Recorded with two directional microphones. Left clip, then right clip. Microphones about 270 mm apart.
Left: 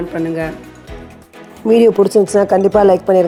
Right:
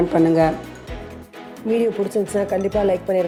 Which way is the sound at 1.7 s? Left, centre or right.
Left.